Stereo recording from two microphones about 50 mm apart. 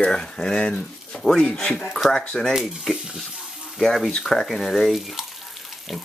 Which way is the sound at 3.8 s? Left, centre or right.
Centre.